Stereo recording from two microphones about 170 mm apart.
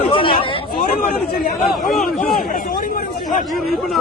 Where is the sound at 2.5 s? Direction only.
55° left (ahead or behind).